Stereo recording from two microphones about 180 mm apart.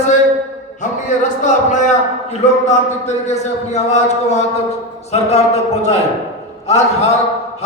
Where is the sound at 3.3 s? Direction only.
40° left (ahead or behind).